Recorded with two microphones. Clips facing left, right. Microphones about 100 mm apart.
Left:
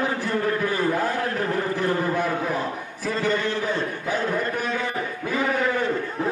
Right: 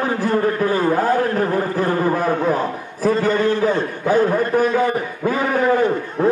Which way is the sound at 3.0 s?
40° right (ahead or behind).